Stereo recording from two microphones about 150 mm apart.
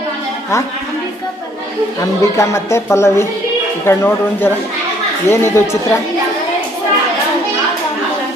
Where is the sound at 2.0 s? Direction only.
20° left (ahead or behind).